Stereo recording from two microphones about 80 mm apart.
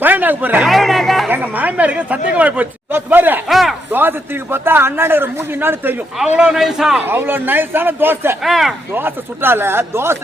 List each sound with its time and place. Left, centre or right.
0.0 s a man's voice: right
0.6 s music: centre
1.3 s a man's voice: right
3.5 s a sound: centre
4.5 s a man's voice: right
6.1 s a man's voice: centre
7.0 s a man's voice: right
8.4 s a man's voice: centre
8.9 s a man's voice: right